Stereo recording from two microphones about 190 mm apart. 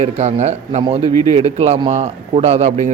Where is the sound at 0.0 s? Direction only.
40° right (ahead or behind).